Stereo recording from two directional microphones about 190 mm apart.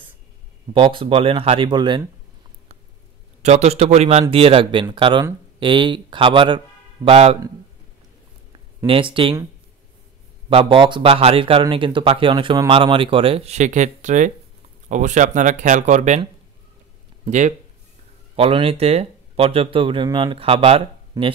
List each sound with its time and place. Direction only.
0.7 s speech: 30° right (ahead or behind)
3.4 s speech: 35° right (ahead or behind)
8.8 s speech: 30° right (ahead or behind)
10.5 s speech: 25° right (ahead or behind)
17.3 s speech: 40° right (ahead or behind)
18.3 s speech: 30° right (ahead or behind)
21.2 s speech: 20° right (ahead or behind)